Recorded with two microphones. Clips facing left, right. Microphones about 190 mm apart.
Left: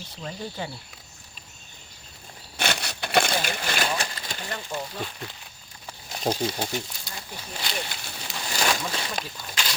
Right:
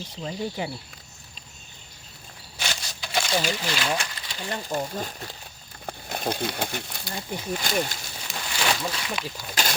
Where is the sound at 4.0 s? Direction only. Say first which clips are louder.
Left 3 dB; 45° left (ahead or behind).